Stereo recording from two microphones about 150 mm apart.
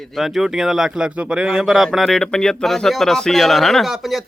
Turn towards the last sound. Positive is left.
turn(degrees=0)  # may be behind; listen again after turning